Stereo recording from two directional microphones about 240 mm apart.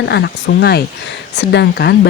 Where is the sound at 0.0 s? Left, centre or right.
Left.